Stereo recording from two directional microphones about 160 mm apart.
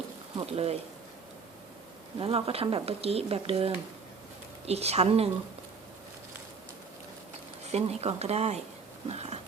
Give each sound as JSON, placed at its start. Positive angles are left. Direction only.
{"t": 0.3, "sound": "speech", "side_deg": -40}
{"t": 2.1, "sound": "speech", "side_deg": -35}
{"t": 7.7, "sound": "speech", "side_deg": -40}
{"t": 9.0, "sound": "a sound", "side_deg": -45}